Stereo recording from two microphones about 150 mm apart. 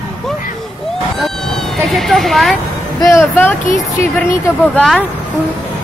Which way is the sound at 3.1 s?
15° left (ahead or behind).